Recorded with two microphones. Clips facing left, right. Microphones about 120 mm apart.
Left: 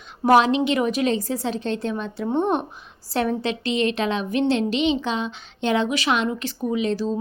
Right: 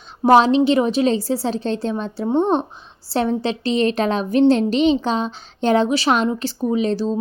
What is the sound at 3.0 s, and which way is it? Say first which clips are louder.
A woman's voice: right 3 dB; 30° right (ahead or behind).